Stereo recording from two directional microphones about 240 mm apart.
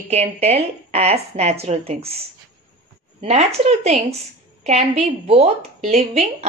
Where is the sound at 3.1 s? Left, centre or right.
Right.